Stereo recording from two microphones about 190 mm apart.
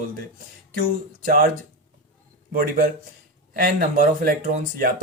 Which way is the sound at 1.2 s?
45° right (ahead or behind).